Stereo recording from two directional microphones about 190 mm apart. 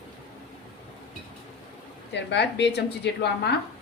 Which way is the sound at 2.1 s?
65° left (ahead or behind).